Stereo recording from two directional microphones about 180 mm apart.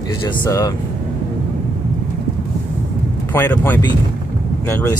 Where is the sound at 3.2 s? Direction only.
10° left (ahead or behind).